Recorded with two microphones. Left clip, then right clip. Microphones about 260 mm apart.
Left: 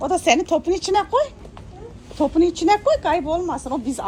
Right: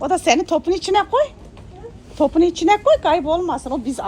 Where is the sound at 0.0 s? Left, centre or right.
Right.